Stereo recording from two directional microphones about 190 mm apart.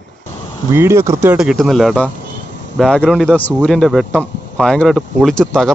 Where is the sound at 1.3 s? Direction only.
Centre (ahead or behind).